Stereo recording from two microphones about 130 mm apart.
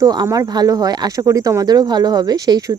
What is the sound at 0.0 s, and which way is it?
Speech, 30° right (ahead or behind).